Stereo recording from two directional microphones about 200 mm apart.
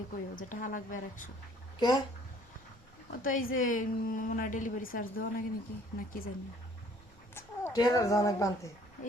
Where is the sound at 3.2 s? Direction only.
45° left (ahead or behind).